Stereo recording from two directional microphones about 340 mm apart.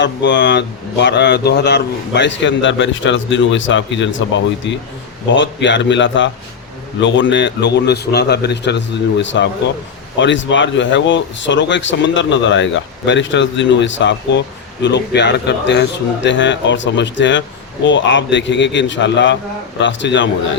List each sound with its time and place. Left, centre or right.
0.0 s speech: left